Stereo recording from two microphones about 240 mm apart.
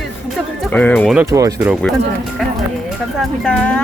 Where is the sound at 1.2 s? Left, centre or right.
Centre.